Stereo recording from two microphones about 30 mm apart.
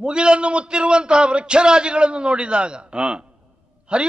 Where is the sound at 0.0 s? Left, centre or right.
Right.